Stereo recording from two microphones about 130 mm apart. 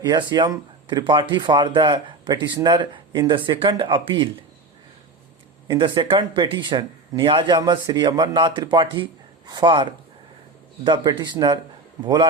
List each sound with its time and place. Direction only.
0.0 s speech: 35° right (ahead or behind)
5.6 s speech: 40° right (ahead or behind)